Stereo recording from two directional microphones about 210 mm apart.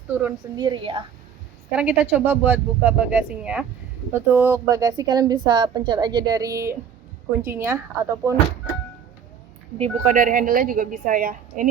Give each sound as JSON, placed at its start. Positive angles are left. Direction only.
{"t": 0.1, "sound": "a woman's voice", "side_deg": -10}
{"t": 0.6, "sound": "a woman's voice", "side_deg": -20}
{"t": 1.7, "sound": "a woman's voice", "side_deg": -5}
{"t": 9.7, "sound": "a woman's voice", "side_deg": -35}